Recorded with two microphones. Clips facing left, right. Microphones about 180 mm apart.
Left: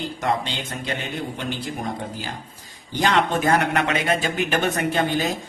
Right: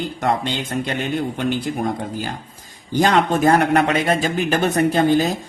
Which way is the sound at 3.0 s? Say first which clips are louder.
Right 4 dB; 40° right (ahead or behind).